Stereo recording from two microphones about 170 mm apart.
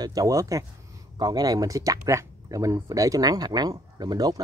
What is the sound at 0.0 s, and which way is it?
Speech, 20° right (ahead or behind).